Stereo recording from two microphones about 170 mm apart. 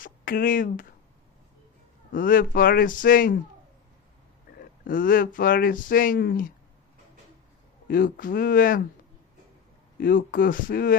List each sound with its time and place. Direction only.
0.0 s speech: 55° left (ahead or behind)
2.1 s a man's voice: 55° left (ahead or behind)
4.6 s speech: 55° left (ahead or behind)
7.9 s speech: 55° left (ahead or behind)
10.0 s speech: 55° left (ahead or behind)